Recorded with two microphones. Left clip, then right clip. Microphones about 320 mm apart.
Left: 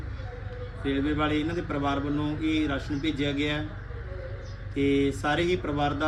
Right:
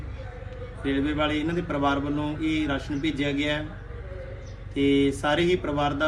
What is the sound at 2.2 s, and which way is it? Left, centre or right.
Speech, centre.